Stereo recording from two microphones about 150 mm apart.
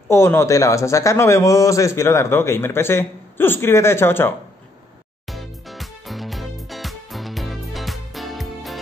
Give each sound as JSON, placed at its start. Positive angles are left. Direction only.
{"t": 0.1, "sound": "a man's voice", "side_deg": 15}
{"t": 5.2, "sound": "music", "side_deg": 0}